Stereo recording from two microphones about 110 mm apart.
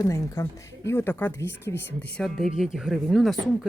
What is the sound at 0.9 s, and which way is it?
Speech, 20° left (ahead or behind).